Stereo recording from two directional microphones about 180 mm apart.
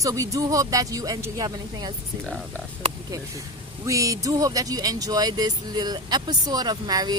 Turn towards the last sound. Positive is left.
turn(degrees=-20)  # may be behind; listen again after turning